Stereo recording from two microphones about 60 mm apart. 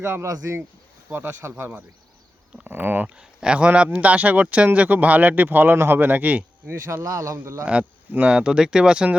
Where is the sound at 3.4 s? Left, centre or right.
Centre.